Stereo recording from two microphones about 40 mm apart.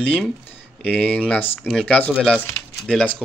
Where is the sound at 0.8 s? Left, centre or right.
Left.